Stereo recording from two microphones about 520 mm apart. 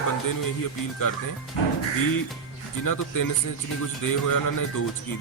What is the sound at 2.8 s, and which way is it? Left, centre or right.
Speech, left.